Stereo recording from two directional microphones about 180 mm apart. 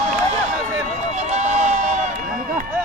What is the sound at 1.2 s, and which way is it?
Run, 40° right (ahead or behind).